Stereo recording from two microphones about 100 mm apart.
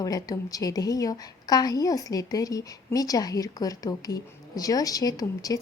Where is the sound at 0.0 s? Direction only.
35° left (ahead or behind).